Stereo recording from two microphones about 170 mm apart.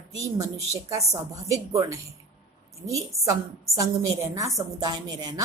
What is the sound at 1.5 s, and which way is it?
Speech, 20° right (ahead or behind).